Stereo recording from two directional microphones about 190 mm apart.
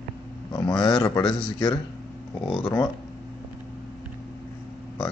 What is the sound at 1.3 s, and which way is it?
Speech, 5° left (ahead or behind).